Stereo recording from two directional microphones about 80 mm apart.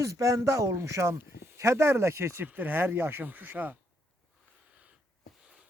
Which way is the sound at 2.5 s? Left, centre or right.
Right.